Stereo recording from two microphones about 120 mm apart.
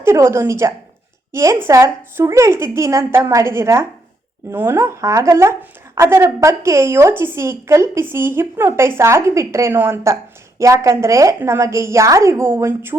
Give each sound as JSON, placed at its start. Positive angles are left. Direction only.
{"t": 0.0, "sound": "speech", "side_deg": -25}